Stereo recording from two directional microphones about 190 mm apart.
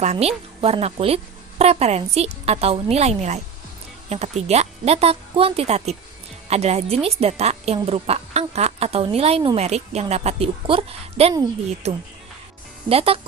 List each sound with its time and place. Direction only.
0.0 s speech: 35° right (ahead or behind)